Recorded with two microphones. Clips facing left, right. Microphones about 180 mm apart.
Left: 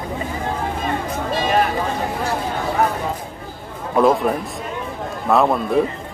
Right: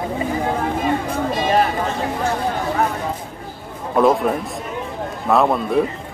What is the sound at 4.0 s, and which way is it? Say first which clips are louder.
Speech: even; centre (ahead or behind).